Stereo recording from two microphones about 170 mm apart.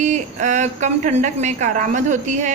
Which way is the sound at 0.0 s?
45° right (ahead or behind).